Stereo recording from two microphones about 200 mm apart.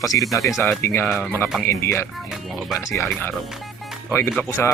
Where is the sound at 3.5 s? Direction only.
Centre (ahead or behind).